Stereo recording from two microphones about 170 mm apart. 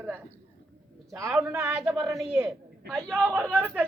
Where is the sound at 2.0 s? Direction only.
20° right (ahead or behind).